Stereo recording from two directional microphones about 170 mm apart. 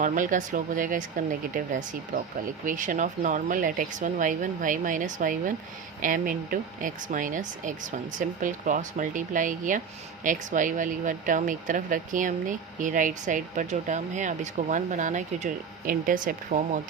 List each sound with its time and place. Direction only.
0.0 s speech: 50° right (ahead or behind)